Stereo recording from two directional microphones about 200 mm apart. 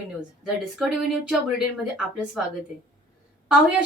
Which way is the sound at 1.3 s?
5° right (ahead or behind).